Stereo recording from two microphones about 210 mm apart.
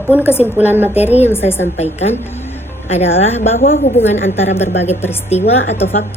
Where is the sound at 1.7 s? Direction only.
30° left (ahead or behind).